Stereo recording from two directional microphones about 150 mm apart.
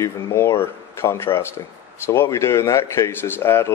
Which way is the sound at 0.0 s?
20° left (ahead or behind).